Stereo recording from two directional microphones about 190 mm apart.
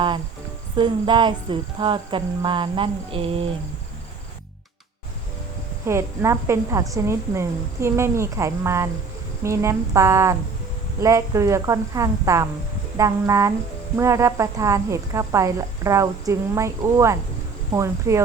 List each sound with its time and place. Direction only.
0.8 s speech: 25° right (ahead or behind)
5.8 s speech: 15° right (ahead or behind)